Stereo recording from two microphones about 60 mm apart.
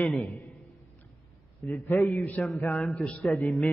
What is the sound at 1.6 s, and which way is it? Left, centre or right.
Speech, left.